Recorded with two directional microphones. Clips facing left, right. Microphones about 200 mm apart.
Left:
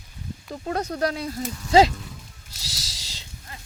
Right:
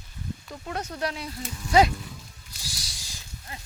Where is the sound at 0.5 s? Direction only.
35° left (ahead or behind).